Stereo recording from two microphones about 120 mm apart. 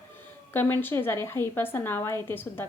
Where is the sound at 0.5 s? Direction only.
15° left (ahead or behind).